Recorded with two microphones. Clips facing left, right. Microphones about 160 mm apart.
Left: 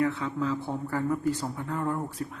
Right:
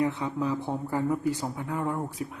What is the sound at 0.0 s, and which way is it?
Speech, 20° right (ahead or behind).